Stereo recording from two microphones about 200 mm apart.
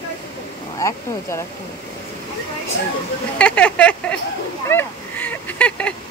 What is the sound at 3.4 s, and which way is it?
Speech, 5° left (ahead or behind).